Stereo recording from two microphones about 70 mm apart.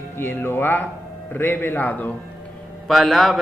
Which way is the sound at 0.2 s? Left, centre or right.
Left.